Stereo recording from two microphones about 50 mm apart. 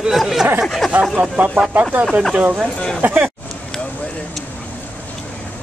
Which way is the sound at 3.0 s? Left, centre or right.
Right.